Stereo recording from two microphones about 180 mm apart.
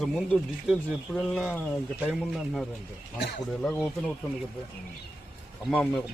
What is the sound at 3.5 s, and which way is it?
Speech, 5° left (ahead or behind).